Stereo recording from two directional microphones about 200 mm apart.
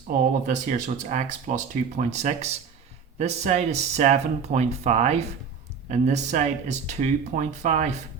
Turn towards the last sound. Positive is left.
turn(degrees=-35)  # may be behind; listen again after turning